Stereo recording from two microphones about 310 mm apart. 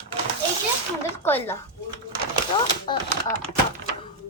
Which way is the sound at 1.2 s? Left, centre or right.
Centre.